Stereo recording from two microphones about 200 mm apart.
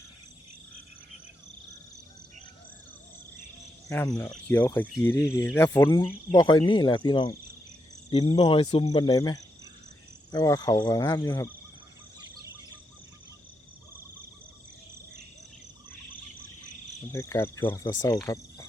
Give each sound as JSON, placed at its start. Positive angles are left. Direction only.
{"t": 3.8, "sound": "speech", "side_deg": 15}
{"t": 17.1, "sound": "speech", "side_deg": 15}